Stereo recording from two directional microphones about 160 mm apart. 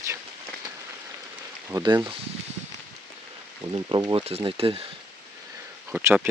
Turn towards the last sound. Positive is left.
turn(degrees=-10)  # may be behind; listen again after turning